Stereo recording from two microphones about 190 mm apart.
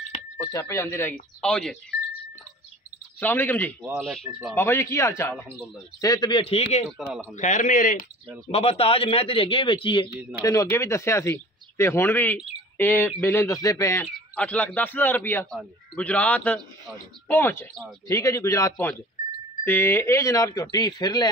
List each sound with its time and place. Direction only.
0.4 s speech: 15° left (ahead or behind)
3.2 s a man's voice: 10° left (ahead or behind)
4.0 s speech: 5° right (ahead or behind)
4.6 s a man's voice: 15° left (ahead or behind); by 6.9 s 35° left (ahead or behind)
7.0 s speech: centre (ahead or behind)
7.3 s a man's voice: 40° left (ahead or behind)
8.5 s a man's voice: 30° left (ahead or behind)